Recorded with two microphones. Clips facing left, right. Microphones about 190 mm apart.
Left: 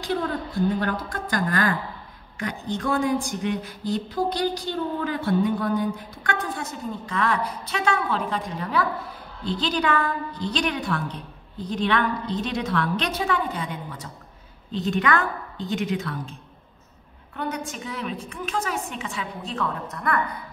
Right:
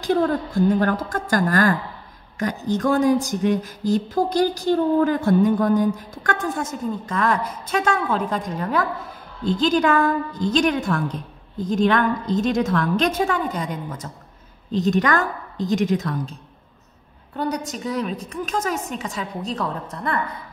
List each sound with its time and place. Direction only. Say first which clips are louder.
0.0 s a sound: right 7 dB; 50° right (ahead or behind)
14.7 s a woman's voice: right 4 dB; 40° right (ahead or behind)
17.4 s a woman's voice: right 5 dB; 35° right (ahead or behind)